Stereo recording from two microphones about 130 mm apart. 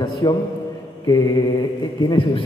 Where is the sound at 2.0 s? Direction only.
40° left (ahead or behind).